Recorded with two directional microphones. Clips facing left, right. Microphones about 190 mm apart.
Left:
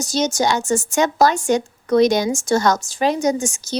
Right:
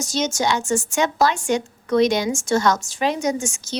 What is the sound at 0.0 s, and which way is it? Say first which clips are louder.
A woman's voice: left 3 dB; 35° left (ahead or behind).